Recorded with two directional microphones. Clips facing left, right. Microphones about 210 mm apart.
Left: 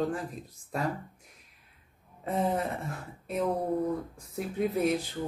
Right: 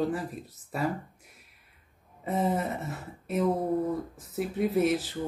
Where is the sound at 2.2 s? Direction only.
5° right (ahead or behind).